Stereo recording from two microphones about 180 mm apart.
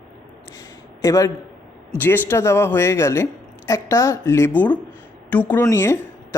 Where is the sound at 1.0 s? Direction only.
20° left (ahead or behind).